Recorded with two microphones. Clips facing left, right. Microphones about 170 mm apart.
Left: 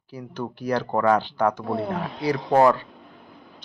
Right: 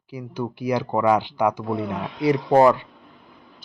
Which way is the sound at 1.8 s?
35° left (ahead or behind).